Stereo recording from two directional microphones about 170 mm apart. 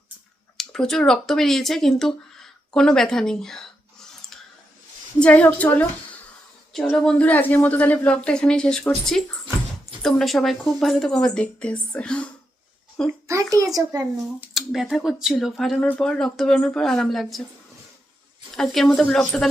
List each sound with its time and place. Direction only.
0.5 s speech: 5° left (ahead or behind)
5.2 s a woman's voice: 10° left (ahead or behind)
13.5 s a child's voice: 20° right (ahead or behind)
14.4 s speech: centre (ahead or behind)
18.5 s speech: centre (ahead or behind)